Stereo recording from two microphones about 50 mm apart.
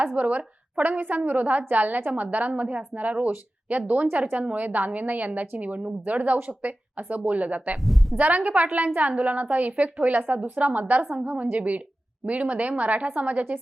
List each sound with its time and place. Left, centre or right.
0.2 s a woman's voice: right